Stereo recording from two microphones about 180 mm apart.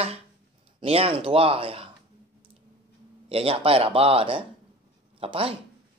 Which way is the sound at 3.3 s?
30° right (ahead or behind).